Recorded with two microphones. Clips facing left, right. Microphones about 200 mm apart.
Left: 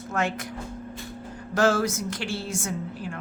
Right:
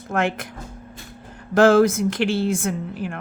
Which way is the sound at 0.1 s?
55° right (ahead or behind).